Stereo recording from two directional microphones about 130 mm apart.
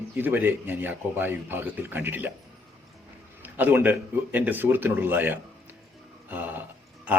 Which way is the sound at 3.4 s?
15° right (ahead or behind).